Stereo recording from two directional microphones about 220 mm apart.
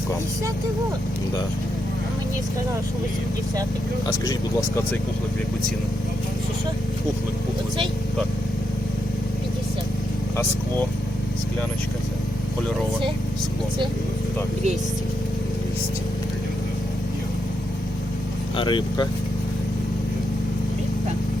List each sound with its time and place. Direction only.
18.5 s speech: 20° left (ahead or behind)